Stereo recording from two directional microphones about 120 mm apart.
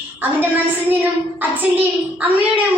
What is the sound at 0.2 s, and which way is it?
A woman's voice, 15° right (ahead or behind).